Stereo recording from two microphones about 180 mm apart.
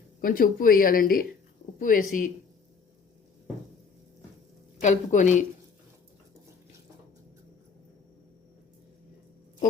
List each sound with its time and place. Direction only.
0.2 s speech: 50° left (ahead or behind)
4.8 s speech: 40° left (ahead or behind)